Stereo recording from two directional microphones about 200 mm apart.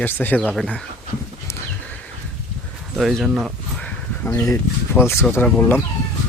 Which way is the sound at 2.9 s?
Centre (ahead or behind).